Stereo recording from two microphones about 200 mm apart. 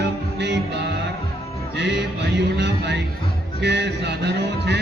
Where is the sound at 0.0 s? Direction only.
60° right (ahead or behind).